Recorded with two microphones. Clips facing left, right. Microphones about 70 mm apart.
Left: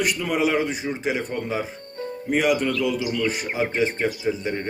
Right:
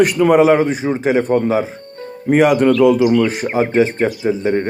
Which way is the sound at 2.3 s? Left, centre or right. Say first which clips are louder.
Right 10 dB; right.